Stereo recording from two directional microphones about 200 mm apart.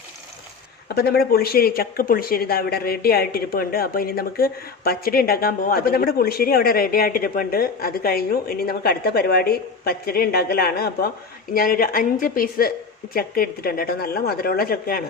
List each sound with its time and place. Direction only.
0.9 s speech: 50° left (ahead or behind)